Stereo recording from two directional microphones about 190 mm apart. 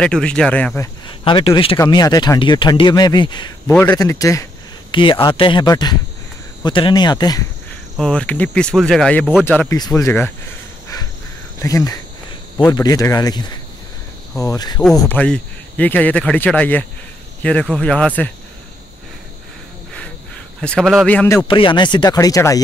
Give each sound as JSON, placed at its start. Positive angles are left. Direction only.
{"t": 0.0, "sound": "speech", "side_deg": 5}
{"t": 1.0, "sound": "speech", "side_deg": 25}
{"t": 8.0, "sound": "speech", "side_deg": 5}
{"t": 11.6, "sound": "speech", "side_deg": 20}
{"t": 14.8, "sound": "speech", "side_deg": 5}
{"t": 20.6, "sound": "speech", "side_deg": 5}
{"t": 21.4, "sound": "speech", "side_deg": 25}